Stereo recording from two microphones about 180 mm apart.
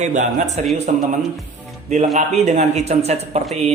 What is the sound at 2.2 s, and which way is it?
Speech, 40° right (ahead or behind).